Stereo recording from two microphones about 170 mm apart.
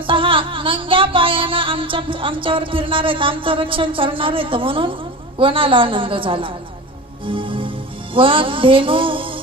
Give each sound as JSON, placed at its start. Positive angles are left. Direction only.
{"t": 0.1, "sound": "music", "side_deg": -30}